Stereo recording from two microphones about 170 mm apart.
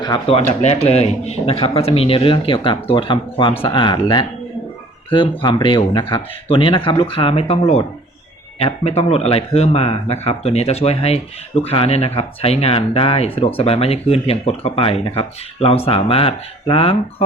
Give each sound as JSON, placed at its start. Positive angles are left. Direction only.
{"t": 0.0, "sound": "speech", "side_deg": 30}
{"t": 0.6, "sound": "speech", "side_deg": 40}
{"t": 5.4, "sound": "speech", "side_deg": 30}